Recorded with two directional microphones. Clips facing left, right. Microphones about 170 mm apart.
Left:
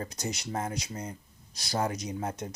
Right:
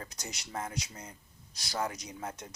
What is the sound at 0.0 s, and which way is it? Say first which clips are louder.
Speech: left 9 dB; 30° left (ahead or behind).